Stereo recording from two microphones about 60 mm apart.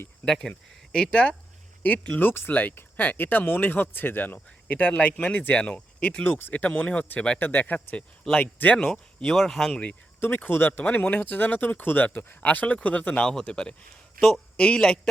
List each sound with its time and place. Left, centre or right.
0.3 s speech: centre
2.1 s speech: left
2.5 s speech: left
9.2 s speech: centre
10.2 s speech: left; by 14.4 s centre
14.5 s a man's voice: centre